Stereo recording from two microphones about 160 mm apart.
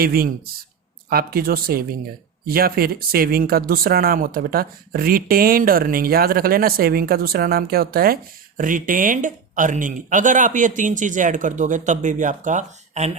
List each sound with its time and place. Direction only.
0.0 s speech: 70° right (ahead or behind); by 13.1 s 45° right (ahead or behind)